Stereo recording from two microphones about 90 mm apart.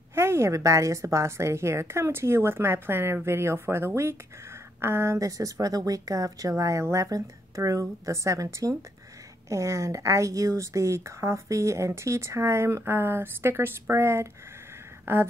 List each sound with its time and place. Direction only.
0.1 s a woman's voice: 30° right (ahead or behind)